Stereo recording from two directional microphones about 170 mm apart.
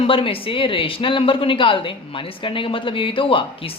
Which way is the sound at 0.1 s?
30° left (ahead or behind).